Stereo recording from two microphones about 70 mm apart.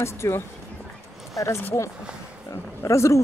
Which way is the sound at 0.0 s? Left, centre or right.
Left.